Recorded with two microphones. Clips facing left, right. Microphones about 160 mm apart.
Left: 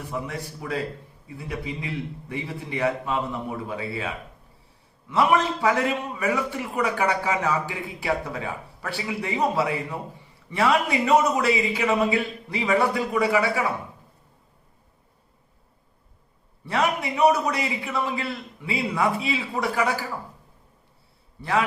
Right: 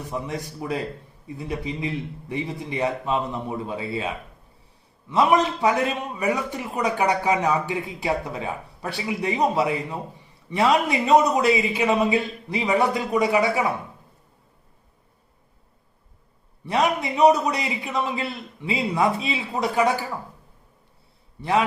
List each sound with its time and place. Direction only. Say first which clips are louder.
0.1 s a man's voice: right 2 dB; 20° right (ahead or behind)
16.6 s a man's voice: right 2 dB; 20° right (ahead or behind)